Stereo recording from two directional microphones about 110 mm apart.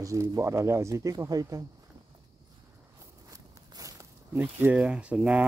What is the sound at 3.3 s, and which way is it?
Walk, 30° right (ahead or behind).